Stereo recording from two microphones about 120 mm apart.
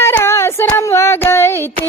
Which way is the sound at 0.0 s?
20° left (ahead or behind).